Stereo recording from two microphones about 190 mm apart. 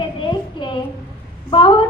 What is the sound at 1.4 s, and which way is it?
Speech, 25° left (ahead or behind).